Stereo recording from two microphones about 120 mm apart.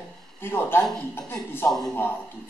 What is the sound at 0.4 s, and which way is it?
Speech, 20° left (ahead or behind).